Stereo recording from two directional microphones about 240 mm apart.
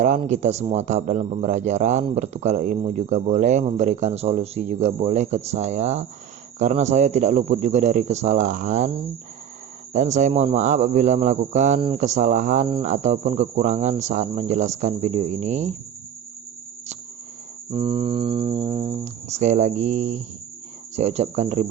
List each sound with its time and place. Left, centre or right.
0.0 s a man's voice: right
17.7 s a man's voice: right